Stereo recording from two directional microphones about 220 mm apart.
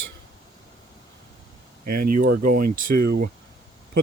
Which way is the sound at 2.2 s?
40° right (ahead or behind).